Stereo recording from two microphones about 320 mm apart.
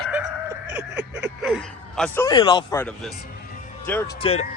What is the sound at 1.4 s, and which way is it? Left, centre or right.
A man's voice, centre.